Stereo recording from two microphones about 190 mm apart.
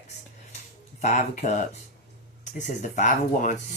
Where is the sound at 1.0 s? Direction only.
40° left (ahead or behind).